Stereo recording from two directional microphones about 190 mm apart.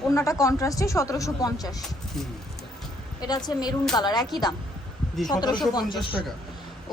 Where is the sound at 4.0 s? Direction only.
20° left (ahead or behind).